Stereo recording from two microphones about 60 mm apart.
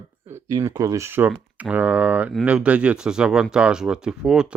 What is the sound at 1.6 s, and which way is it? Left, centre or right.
Speech, right.